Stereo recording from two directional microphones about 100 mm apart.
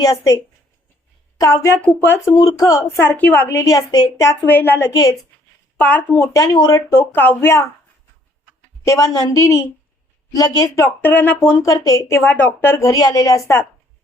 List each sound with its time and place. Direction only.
0.0 s a woman's voice: 35° left (ahead or behind)
1.4 s a woman's voice: 35° left (ahead or behind); by 3.6 s 20° left (ahead or behind)
3.6 s a woman's voice: 35° left (ahead or behind)
5.8 s a woman's voice: 20° left (ahead or behind)
6.3 s a woman's voice: 40° left (ahead or behind)
6.9 s a woman's voice: 15° left (ahead or behind)
8.8 s a woman's voice: 35° left (ahead or behind)
11.6 s a woman's voice: 35° left (ahead or behind); by 12.7 s 20° left (ahead or behind)
12.8 s a woman's voice: 40° left (ahead or behind)